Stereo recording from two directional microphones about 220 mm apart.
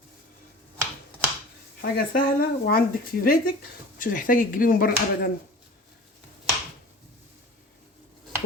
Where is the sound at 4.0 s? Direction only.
40° left (ahead or behind).